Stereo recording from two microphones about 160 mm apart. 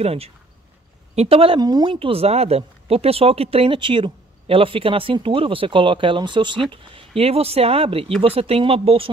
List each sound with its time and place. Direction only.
0.0 s speech: 40° right (ahead or behind)